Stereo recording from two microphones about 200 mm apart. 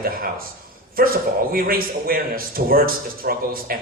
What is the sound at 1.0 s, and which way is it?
A man's voice, 45° right (ahead or behind).